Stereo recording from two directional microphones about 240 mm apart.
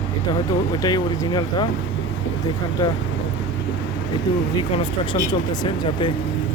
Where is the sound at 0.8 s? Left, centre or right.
Centre.